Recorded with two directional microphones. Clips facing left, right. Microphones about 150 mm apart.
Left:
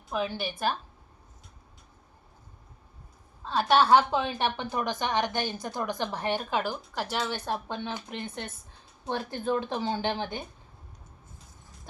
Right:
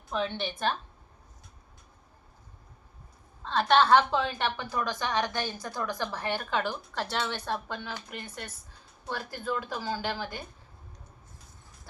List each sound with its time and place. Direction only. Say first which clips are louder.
0.1 s a woman's voice: even; 5° left (ahead or behind)
3.4 s a woman's voice: even; 10° left (ahead or behind)